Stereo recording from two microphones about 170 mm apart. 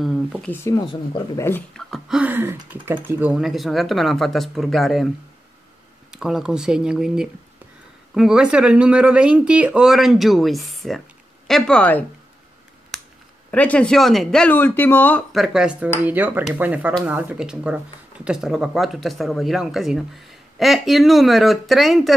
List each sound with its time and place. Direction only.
0.0 s speech: centre (ahead or behind)
0.7 s speech: 25° left (ahead or behind)
1.5 s speech: centre (ahead or behind)
6.1 s speech: 5° right (ahead or behind)
13.5 s speech: 10° left (ahead or behind)
15.3 s speech: centre (ahead or behind)